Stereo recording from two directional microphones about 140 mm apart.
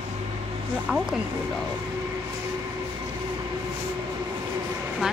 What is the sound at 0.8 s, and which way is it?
Speech, 5° right (ahead or behind).